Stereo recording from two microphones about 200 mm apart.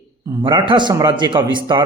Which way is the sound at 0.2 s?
15° right (ahead or behind).